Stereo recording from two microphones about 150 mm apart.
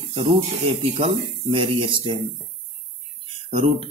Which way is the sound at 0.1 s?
40° right (ahead or behind).